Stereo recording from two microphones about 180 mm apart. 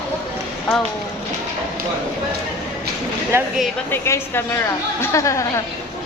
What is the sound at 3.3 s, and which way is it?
Speech, 15° right (ahead or behind).